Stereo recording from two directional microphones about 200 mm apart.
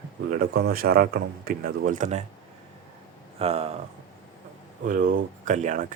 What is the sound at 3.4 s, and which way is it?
Speech, 30° right (ahead or behind).